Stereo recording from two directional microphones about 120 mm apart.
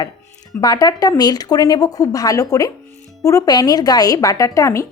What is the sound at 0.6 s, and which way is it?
Speech, 35° left (ahead or behind).